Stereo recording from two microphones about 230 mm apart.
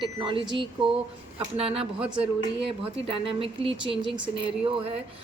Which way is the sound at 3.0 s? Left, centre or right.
Right.